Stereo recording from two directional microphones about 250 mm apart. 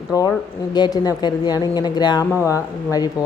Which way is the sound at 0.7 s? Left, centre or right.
Centre.